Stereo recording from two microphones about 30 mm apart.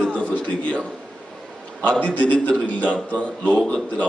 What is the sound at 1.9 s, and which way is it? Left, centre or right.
A man's voice, left.